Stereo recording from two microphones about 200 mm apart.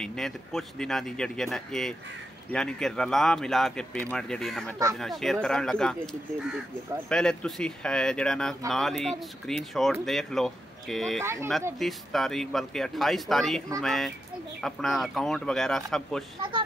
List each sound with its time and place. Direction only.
0.0 s speech: centre (ahead or behind)
7.1 s speech: 5° left (ahead or behind)
11.2 s speech: 15° right (ahead or behind)
11.8 s speech: centre (ahead or behind)
16.3 s speech: 25° right (ahead or behind)